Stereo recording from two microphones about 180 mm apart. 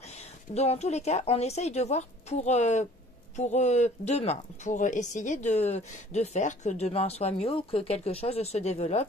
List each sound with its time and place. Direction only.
0.1 s speech: 35° left (ahead or behind)